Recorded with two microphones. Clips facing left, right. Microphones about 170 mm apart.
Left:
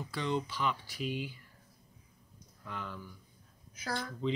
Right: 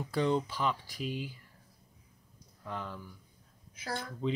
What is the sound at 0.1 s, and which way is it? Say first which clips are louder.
Speech: right 5 dB; 45° right (ahead or behind).